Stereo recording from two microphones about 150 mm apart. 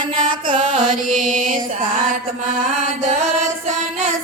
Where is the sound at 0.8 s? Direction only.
60° right (ahead or behind).